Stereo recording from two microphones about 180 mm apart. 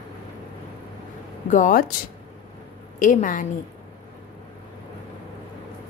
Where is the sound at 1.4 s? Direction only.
45° left (ahead or behind).